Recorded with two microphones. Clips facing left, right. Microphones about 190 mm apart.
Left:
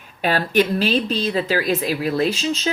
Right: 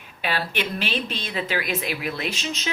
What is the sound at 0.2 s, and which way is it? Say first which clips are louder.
Speech: left 9 dB; 45° left (ahead or behind).